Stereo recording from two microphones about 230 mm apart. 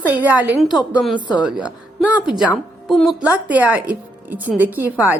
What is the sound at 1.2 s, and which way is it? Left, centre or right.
Speech, centre.